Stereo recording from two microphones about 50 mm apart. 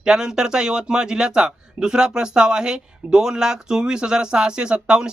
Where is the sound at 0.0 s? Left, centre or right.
Centre.